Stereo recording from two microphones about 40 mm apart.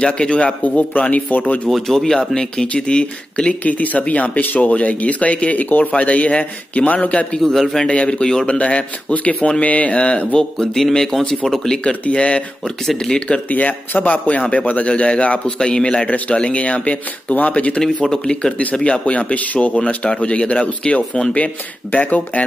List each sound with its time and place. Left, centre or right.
0.0 s speech: left
1.7 s speech: centre
2.3 s speech: left
3.6 s speech: left
7.4 s speech: centre
7.8 s speech: left
8.5 s speech: left
10.6 s speech: centre
11.8 s speech: left
12.8 s speech: centre
13.5 s speech: left
15.6 s speech: left
18.2 s speech: centre
21.9 s speech: left